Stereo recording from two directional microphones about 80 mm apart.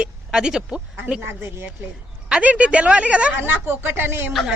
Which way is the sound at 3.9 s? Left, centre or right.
Right.